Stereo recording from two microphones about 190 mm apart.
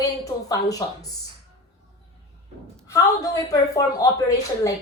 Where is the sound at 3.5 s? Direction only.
20° left (ahead or behind).